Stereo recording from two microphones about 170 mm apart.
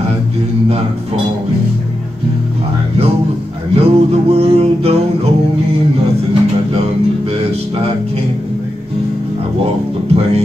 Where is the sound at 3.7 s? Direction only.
35° right (ahead or behind).